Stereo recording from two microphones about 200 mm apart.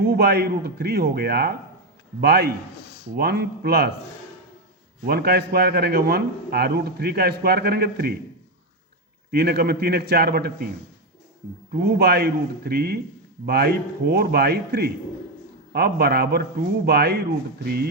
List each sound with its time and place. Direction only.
0.0 s a man's voice: 55° right (ahead or behind)
5.0 s a man's voice: 50° right (ahead or behind)
9.3 s a man's voice: 55° right (ahead or behind)
11.7 s a man's voice: 55° right (ahead or behind)